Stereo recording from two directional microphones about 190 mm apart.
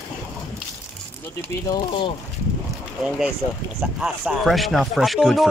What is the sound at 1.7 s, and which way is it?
Speech, 25° left (ahead or behind).